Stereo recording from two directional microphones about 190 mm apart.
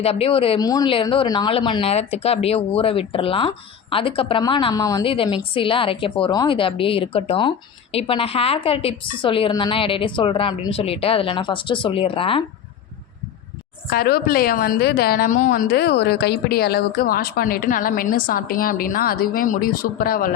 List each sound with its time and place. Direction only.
0.0 s speech: 30° left (ahead or behind)
13.9 s a woman's voice: 55° left (ahead or behind)